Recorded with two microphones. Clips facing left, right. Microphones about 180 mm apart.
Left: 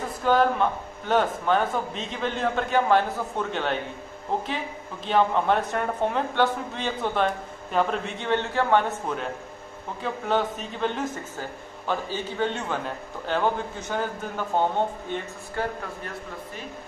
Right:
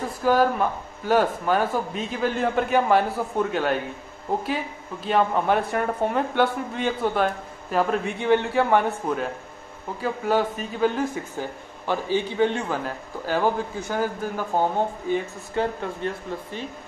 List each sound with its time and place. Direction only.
0.2 s speech: 5° right (ahead or behind)
5.0 s a man's voice: 5° right (ahead or behind)
16.0 s speech: 25° right (ahead or behind)